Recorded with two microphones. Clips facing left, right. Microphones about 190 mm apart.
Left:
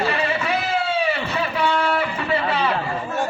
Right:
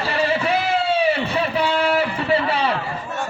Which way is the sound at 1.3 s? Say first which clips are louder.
Right 1 dB; 30° right (ahead or behind).